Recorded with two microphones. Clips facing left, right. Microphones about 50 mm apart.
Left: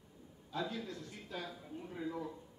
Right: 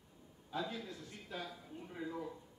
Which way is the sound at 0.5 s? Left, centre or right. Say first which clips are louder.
Left 1 dB; centre.